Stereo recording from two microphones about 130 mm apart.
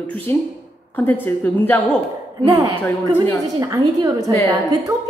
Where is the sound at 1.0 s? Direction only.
15° left (ahead or behind).